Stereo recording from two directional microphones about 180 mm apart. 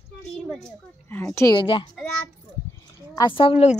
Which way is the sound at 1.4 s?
30° left (ahead or behind).